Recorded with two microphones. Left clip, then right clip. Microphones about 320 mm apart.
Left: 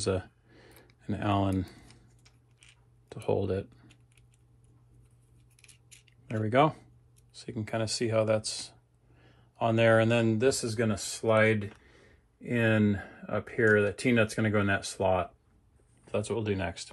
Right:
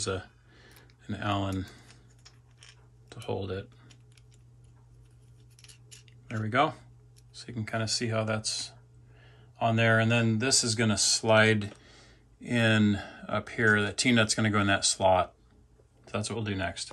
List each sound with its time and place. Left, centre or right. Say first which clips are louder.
0.0 s a sound: left 2 dB; centre
3.1 s speech: left 5 dB; centre
5.6 s scissors: right 4 dB; centre
6.0 s speech: left 4 dB; centre